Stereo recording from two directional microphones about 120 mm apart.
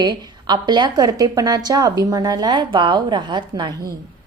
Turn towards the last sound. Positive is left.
turn(degrees=-35)  # may be behind; listen again after turning